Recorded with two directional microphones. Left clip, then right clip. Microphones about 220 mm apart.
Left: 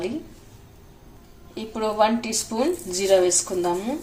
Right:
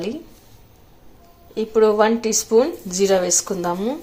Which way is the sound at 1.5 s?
35° right (ahead or behind).